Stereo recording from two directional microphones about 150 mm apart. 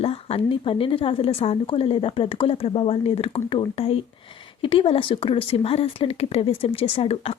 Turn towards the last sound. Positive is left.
turn(degrees=40)  # may be behind; listen again after turning